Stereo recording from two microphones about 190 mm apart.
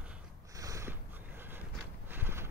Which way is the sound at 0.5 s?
15° right (ahead or behind).